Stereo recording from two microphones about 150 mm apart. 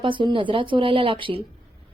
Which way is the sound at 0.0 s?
35° right (ahead or behind).